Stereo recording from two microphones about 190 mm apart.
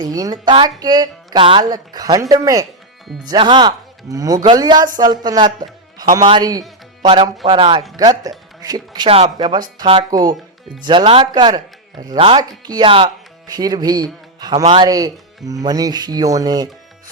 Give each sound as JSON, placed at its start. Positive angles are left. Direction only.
{"t": 0.0, "sound": "a man's voice", "side_deg": -20}